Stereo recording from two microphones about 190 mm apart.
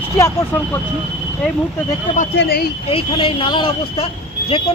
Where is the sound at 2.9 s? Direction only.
30° left (ahead or behind).